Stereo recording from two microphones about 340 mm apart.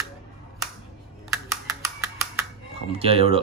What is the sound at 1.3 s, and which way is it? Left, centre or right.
Computer keyboard, centre.